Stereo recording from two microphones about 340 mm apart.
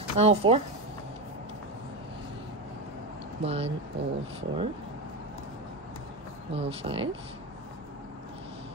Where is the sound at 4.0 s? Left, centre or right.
Right.